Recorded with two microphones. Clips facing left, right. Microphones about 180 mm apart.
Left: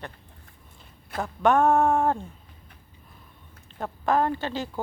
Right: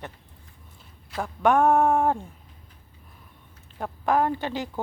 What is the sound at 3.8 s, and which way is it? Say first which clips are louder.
Speech: even; 10° right (ahead or behind).